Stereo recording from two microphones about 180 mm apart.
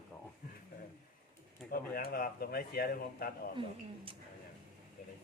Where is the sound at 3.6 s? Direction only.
30° right (ahead or behind).